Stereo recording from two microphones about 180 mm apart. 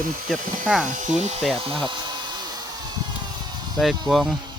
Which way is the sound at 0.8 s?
45° right (ahead or behind).